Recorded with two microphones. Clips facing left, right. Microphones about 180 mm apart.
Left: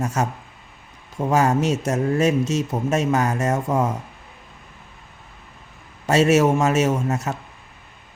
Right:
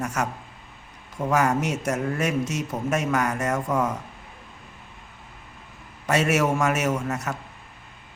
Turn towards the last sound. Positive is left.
turn(degrees=25)  # may be behind; listen again after turning